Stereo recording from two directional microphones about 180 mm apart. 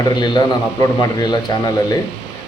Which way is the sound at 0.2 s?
20° left (ahead or behind).